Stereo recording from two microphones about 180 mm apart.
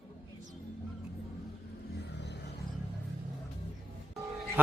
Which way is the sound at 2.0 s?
70° left (ahead or behind).